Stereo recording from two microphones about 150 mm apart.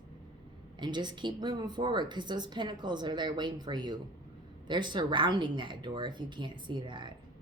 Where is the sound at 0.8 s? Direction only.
30° right (ahead or behind).